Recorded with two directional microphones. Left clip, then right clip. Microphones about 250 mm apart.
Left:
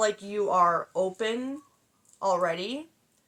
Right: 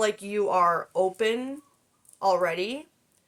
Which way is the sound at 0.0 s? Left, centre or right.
Right.